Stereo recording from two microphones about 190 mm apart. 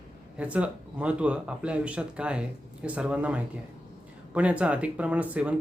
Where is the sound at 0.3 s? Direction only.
5° right (ahead or behind).